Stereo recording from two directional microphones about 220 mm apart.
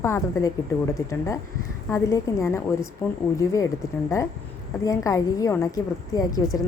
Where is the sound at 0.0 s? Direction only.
15° left (ahead or behind).